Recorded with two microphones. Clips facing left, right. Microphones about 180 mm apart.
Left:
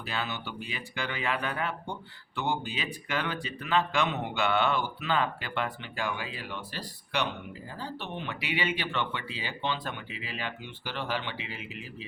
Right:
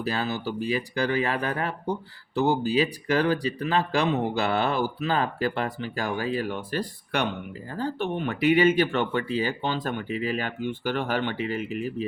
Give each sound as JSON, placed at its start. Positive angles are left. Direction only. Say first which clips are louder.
{"t": 0.0, "sound": "speech", "louder": "right 7 dB", "side_deg": -40}